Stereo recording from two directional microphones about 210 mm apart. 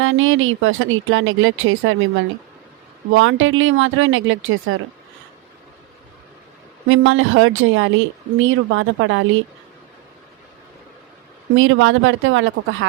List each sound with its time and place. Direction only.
0.0 s speech: 70° right (ahead or behind)
6.8 s speech: 70° right (ahead or behind)
11.5 s speech: 70° right (ahead or behind)